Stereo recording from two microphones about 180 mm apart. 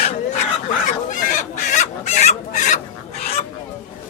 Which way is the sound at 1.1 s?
50° left (ahead or behind).